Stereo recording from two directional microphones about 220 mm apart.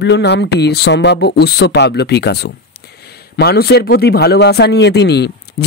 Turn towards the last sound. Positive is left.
turn(degrees=50)  # may be behind; listen again after turning